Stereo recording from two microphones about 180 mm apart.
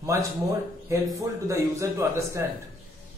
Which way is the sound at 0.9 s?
15° right (ahead or behind).